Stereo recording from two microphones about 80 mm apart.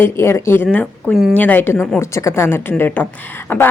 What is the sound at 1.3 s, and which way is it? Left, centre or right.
A woman's voice, left.